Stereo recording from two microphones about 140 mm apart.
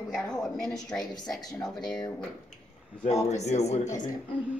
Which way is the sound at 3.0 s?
55° left (ahead or behind).